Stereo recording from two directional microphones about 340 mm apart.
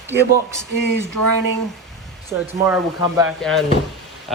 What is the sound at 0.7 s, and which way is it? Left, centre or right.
Speech, right.